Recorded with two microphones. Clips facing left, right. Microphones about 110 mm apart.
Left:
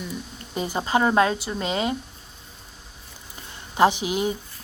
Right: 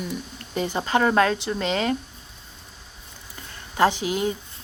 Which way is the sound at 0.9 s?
25° left (ahead or behind).